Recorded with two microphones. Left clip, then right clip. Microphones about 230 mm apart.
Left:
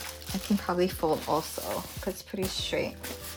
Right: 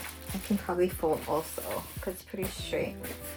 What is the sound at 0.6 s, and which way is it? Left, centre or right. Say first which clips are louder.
Speech: left 1 dB; left.